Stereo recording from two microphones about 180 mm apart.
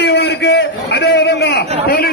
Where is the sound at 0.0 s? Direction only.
65° left (ahead or behind).